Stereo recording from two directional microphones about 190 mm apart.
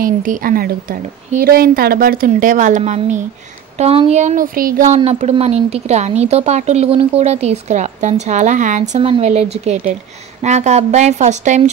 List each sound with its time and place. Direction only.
0.0 s a woman's voice: 45° right (ahead or behind)